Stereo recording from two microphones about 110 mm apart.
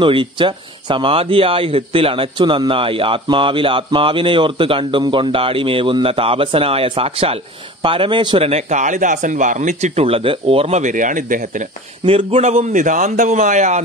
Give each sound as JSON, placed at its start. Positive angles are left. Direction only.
{"t": 0.0, "sound": "speech", "side_deg": -50}
{"t": 7.8, "sound": "speech", "side_deg": -50}
{"t": 8.4, "sound": "speech", "side_deg": -75}
{"t": 12.1, "sound": "a man's voice", "side_deg": -55}
{"t": 12.4, "sound": "speech", "side_deg": -90}